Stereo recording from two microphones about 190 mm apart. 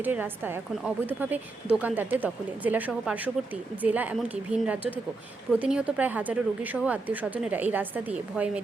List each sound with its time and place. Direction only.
0.0 s speech: 10° right (ahead or behind)